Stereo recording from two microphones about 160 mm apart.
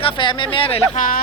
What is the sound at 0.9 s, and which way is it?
Speech, 55° left (ahead or behind).